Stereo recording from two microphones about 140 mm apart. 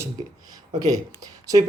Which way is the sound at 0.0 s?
25° right (ahead or behind).